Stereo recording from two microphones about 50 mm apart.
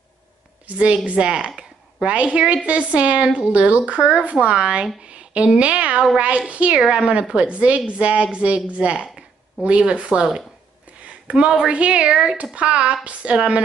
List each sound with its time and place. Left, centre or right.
0.7 s a woman's voice: right
12.5 s a woman's voice: right